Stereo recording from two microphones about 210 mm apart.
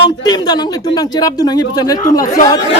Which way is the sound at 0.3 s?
20° left (ahead or behind).